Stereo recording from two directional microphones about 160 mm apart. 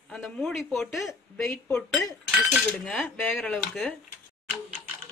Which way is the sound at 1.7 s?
15° left (ahead or behind).